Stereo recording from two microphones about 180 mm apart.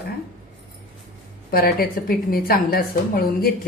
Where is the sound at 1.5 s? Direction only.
55° left (ahead or behind).